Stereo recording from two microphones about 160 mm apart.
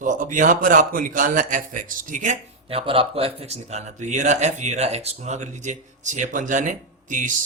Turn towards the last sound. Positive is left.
turn(degrees=-55)  # may be behind; listen again after turning